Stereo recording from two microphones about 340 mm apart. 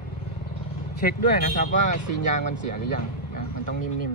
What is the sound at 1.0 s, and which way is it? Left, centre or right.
Speech, left.